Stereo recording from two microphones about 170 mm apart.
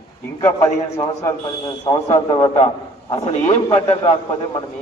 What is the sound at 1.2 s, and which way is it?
Speech, 20° left (ahead or behind).